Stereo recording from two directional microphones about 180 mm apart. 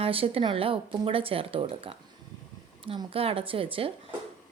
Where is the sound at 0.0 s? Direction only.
30° right (ahead or behind).